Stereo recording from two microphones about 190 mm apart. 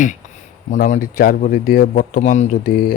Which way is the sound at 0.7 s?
40° left (ahead or behind).